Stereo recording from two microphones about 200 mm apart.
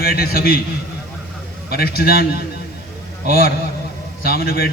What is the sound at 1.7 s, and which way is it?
Speech, 50° left (ahead or behind).